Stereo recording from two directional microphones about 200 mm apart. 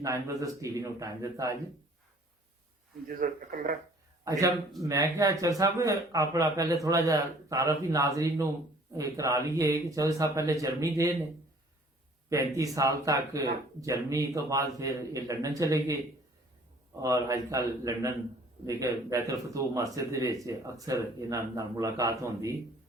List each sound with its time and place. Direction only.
0.0 s a man's voice: 15° right (ahead or behind)
3.1 s speech: 45° right (ahead or behind)
4.2 s a man's voice: 15° right (ahead or behind)
12.5 s a man's voice: 15° right (ahead or behind)
17.0 s a man's voice: 15° right (ahead or behind)